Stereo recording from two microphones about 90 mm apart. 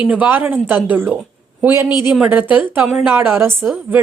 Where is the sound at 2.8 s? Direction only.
5° right (ahead or behind).